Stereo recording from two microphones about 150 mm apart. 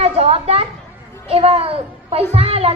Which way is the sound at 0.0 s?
40° right (ahead or behind).